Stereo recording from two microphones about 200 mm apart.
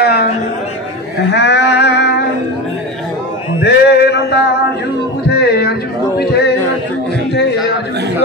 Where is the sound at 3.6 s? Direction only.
55° left (ahead or behind).